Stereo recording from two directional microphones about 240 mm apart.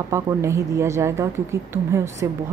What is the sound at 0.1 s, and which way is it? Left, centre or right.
A woman's voice, centre.